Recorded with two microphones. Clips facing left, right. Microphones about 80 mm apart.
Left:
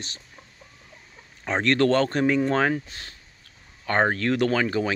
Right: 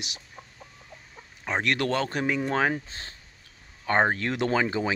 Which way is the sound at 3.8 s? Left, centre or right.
Centre.